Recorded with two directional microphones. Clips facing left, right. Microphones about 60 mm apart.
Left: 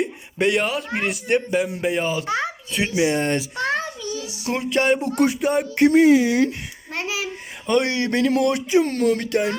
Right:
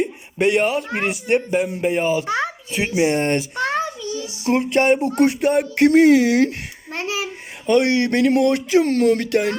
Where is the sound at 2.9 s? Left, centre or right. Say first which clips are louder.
Right 2 dB; right.